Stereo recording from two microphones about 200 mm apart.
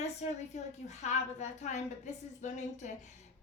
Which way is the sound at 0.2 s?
35° left (ahead or behind).